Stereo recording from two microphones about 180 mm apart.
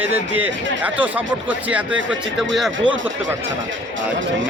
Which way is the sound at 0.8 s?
10° right (ahead or behind).